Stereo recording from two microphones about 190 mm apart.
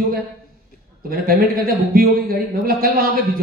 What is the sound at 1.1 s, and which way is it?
A man's voice, 50° right (ahead or behind).